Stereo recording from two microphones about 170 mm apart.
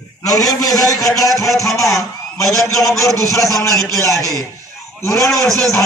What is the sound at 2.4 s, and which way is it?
A man's voice, 20° left (ahead or behind).